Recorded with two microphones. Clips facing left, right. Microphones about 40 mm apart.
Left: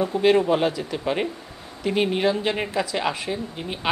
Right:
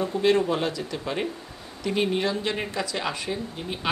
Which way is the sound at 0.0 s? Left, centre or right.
Centre.